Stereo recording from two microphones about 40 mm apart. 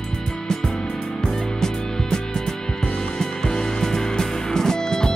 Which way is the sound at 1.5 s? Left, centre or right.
Centre.